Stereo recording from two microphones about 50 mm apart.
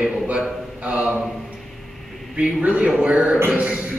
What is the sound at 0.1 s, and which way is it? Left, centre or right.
A man's voice, centre.